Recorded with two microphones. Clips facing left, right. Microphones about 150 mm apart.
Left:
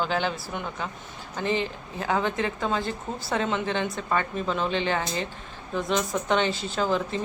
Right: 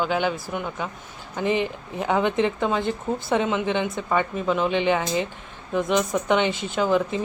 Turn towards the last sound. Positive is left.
turn(degrees=-10)  # may be behind; listen again after turning